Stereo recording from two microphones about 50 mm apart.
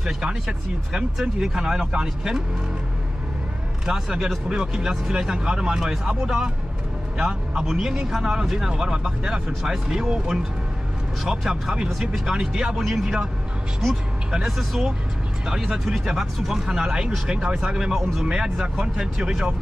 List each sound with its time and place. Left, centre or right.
0.0 s speech: centre
3.8 s speech: centre
14.4 s speech: centre